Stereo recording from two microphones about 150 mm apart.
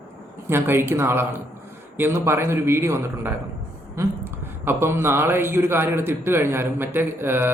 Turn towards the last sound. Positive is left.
turn(degrees=-15)  # may be behind; listen again after turning